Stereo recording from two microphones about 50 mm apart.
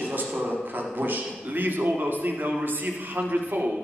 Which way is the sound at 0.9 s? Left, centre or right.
Right.